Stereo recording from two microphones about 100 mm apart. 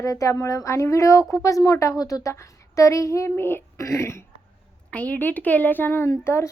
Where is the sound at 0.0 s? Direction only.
35° left (ahead or behind).